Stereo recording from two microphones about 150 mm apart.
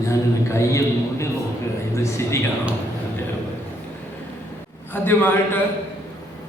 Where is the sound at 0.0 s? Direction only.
20° left (ahead or behind).